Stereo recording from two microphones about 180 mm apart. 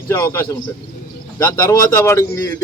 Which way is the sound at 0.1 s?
15° left (ahead or behind).